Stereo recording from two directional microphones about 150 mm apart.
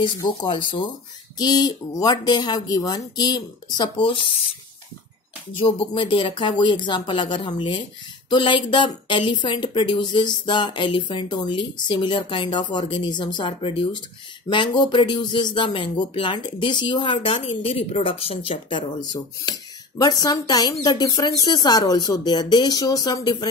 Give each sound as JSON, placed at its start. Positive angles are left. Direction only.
{"t": 0.2, "sound": "a woman's voice", "side_deg": 30}
{"t": 5.6, "sound": "a woman's voice", "side_deg": 30}